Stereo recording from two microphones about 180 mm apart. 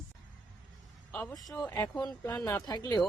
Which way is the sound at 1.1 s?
5° left (ahead or behind).